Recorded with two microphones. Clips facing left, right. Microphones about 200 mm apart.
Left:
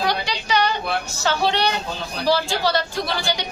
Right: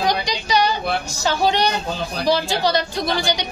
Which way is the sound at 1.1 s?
15° right (ahead or behind).